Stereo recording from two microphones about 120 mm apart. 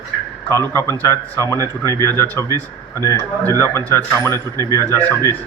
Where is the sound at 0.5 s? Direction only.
20° left (ahead or behind).